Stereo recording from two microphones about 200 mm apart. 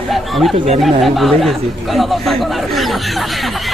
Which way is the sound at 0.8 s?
Centre (ahead or behind).